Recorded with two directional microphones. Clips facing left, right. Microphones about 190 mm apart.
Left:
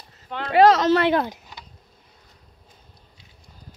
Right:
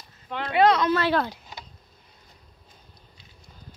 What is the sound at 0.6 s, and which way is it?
Speech, 90° left.